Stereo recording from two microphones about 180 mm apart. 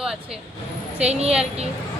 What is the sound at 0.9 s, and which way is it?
Speech, 35° right (ahead or behind).